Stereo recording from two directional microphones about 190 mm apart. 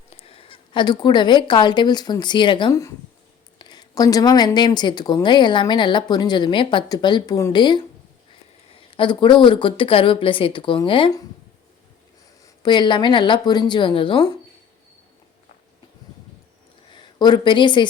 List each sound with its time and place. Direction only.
0.2 s a woman's voice: 30° left (ahead or behind)
9.0 s a woman's voice: 25° left (ahead or behind)
12.6 s a woman's voice: 25° left (ahead or behind)
16.9 s speech: 25° left (ahead or behind)